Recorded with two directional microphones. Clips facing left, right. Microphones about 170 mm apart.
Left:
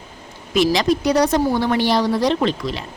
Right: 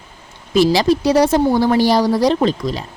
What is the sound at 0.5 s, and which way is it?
A woman's voice, 30° right (ahead or behind).